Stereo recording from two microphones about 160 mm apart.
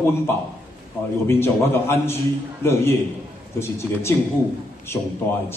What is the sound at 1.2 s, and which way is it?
A man's voice, 15° left (ahead or behind).